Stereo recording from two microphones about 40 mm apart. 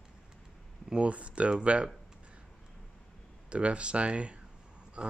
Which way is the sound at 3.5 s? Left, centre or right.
Right.